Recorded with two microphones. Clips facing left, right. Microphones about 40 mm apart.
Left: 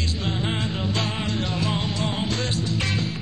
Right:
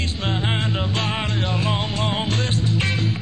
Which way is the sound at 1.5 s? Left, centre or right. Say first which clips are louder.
Right 2 dB; right.